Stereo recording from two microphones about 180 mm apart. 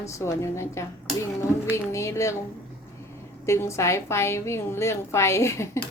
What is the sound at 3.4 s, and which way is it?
Speech, 15° left (ahead or behind).